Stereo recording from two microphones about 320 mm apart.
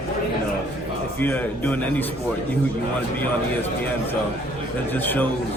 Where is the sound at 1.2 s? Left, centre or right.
Centre.